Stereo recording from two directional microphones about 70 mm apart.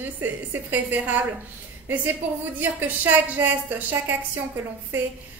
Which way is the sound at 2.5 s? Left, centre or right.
Right.